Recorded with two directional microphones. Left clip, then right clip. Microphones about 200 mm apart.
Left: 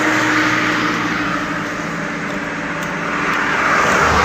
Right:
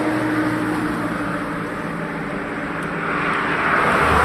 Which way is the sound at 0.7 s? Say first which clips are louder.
Left 6 dB; 40° right (ahead or behind).